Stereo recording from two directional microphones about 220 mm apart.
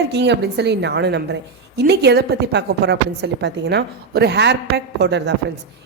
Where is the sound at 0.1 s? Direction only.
50° right (ahead or behind).